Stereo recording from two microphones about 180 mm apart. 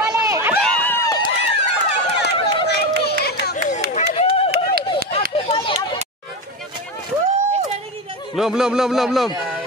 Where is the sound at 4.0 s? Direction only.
35° left (ahead or behind).